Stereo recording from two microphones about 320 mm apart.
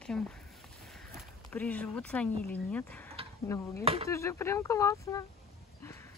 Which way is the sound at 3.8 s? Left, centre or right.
Centre.